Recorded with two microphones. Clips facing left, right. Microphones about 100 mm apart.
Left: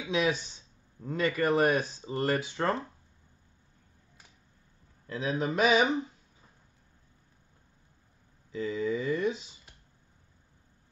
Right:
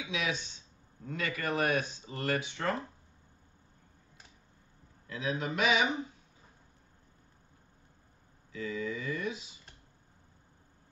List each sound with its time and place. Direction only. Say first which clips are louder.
0.1 s speech: left 8 dB; 40° left (ahead or behind)
5.0 s speech: left 4 dB; 35° left (ahead or behind)
8.5 s speech: left 6 dB; 35° left (ahead or behind)